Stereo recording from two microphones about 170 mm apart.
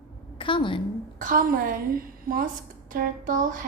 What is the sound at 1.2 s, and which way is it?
A woman's voice, 55° right (ahead or behind).